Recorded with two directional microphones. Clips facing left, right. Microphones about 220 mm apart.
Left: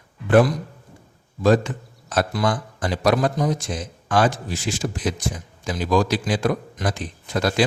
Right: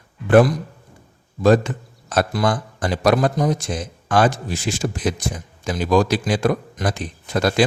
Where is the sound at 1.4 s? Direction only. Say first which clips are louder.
Right 2 dB; 55° right (ahead or behind).